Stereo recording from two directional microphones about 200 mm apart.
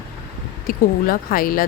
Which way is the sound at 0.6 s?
45° left (ahead or behind).